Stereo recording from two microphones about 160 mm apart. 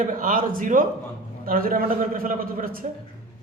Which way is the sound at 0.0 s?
55° right (ahead or behind).